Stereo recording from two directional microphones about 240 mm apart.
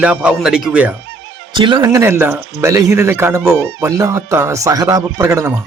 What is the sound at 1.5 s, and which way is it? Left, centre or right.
Speech, centre.